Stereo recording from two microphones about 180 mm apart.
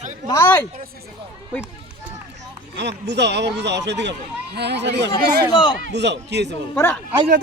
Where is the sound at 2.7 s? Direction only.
75° right (ahead or behind).